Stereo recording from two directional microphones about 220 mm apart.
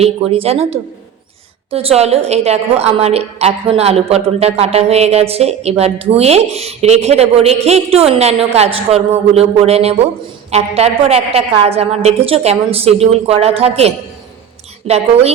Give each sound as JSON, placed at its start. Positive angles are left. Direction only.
{"t": 0.0, "sound": "a woman's voice", "side_deg": -25}